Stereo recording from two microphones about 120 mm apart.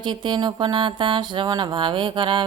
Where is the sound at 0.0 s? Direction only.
40° right (ahead or behind).